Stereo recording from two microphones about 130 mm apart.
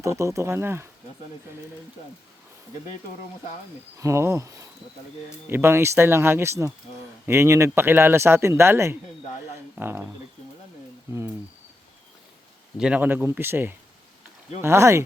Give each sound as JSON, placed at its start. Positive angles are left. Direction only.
{"t": 0.0, "sound": "speech", "side_deg": -25}
{"t": 3.9, "sound": "a man's voice", "side_deg": -20}
{"t": 12.7, "sound": "a man's voice", "side_deg": -10}